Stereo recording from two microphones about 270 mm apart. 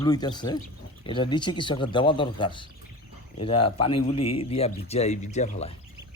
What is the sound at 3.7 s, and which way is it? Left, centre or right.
A man's voice, left.